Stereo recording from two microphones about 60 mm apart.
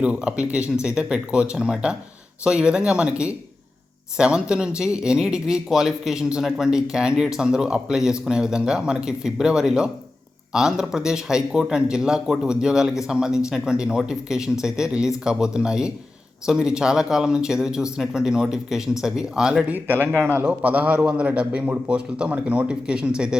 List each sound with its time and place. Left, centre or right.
0.0 s speech: centre
19.6 s speech: right
20.4 s a man's voice: right